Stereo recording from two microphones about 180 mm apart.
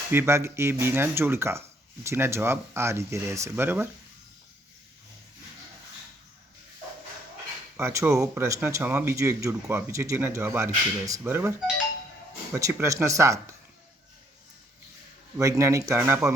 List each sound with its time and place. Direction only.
0.1 s speech: 15° right (ahead or behind)
7.8 s speech: 15° right (ahead or behind)
12.7 s speech: 15° right (ahead or behind)
15.4 s speech: 15° right (ahead or behind)